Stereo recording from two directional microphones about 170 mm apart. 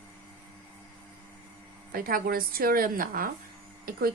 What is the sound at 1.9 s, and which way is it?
A woman's voice, 60° right (ahead or behind).